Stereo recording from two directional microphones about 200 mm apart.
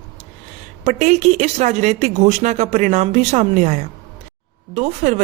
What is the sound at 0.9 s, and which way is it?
A woman's voice, 35° right (ahead or behind).